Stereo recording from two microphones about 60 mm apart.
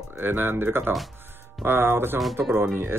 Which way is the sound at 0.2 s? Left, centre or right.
Right.